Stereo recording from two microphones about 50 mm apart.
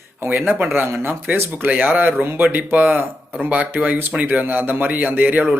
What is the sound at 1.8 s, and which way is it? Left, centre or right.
A man's voice, right.